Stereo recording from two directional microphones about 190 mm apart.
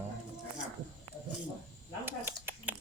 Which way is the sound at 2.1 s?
10° right (ahead or behind).